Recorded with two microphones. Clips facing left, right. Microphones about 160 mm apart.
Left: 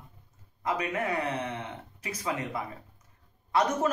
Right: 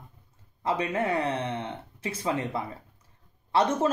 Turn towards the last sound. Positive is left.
turn(degrees=-30)  # may be behind; listen again after turning